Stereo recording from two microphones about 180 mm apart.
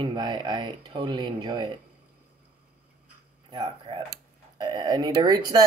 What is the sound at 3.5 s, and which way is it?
Speech, 25° right (ahead or behind).